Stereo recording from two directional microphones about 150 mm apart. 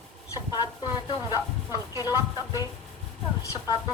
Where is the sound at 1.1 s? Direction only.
25° left (ahead or behind).